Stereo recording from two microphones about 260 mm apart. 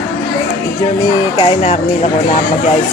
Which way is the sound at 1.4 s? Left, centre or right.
Left.